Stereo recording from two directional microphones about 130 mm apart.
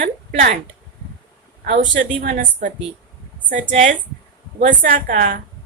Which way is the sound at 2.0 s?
85° right.